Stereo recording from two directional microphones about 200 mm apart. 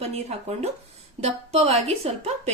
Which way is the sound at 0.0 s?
30° right (ahead or behind).